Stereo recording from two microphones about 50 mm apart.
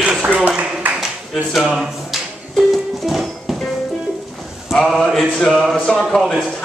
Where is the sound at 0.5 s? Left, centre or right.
Right.